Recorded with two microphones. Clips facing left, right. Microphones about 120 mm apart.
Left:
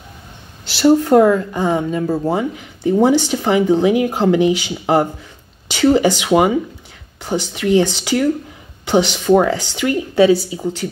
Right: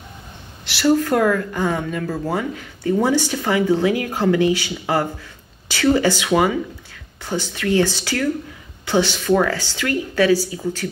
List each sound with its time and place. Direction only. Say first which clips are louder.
0.7 s speech: left 5 dB; 25° left (ahead or behind)